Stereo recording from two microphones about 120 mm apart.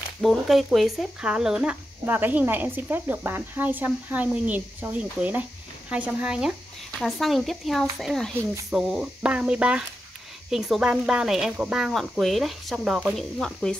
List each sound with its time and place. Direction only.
0.2 s speech: centre (ahead or behind)